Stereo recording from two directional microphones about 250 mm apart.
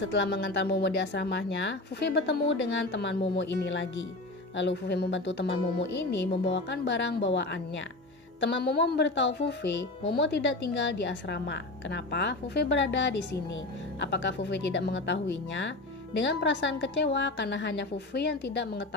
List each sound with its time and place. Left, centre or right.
0.0 s speech: left
8.4 s speech: left